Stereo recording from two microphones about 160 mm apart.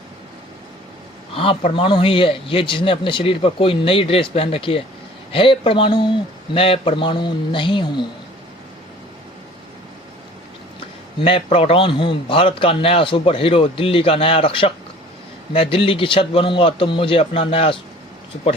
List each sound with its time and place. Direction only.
1.4 s a man's voice: 35° left (ahead or behind)
11.2 s a man's voice: 35° left (ahead or behind)